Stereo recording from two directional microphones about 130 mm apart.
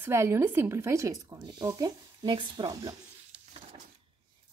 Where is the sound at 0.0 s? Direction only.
20° right (ahead or behind).